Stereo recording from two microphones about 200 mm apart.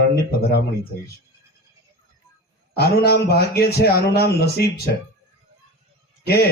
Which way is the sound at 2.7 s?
55° left (ahead or behind).